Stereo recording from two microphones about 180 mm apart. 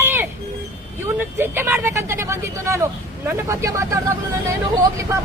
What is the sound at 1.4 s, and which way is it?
Speech, 10° right (ahead or behind).